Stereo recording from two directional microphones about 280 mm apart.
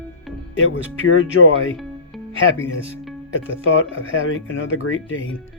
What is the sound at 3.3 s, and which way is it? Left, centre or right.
Speech, left.